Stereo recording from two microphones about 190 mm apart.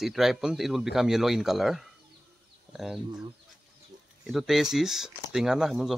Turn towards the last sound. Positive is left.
turn(degrees=0)  # may be behind; listen again after turning